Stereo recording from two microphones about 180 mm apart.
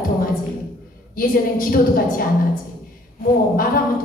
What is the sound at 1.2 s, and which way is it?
A woman's voice, 50° left (ahead or behind).